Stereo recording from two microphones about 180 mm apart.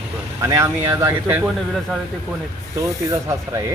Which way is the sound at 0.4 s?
15° right (ahead or behind).